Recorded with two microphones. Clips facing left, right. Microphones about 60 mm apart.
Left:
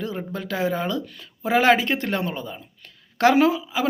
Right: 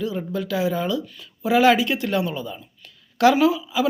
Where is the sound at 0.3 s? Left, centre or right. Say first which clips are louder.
Right 1 dB; left.